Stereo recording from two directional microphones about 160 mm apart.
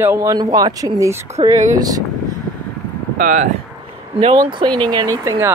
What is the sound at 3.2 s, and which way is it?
Speech, 55° right (ahead or behind).